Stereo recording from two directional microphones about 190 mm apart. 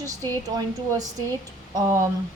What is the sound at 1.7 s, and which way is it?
Speech, 15° right (ahead or behind).